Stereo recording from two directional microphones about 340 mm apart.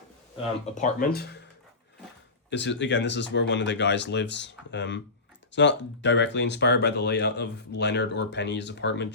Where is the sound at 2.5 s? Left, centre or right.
Left.